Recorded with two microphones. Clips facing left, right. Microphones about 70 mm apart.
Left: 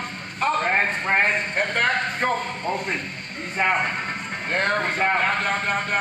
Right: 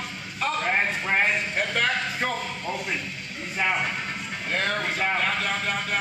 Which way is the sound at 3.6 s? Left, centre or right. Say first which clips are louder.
Left 4 dB; left.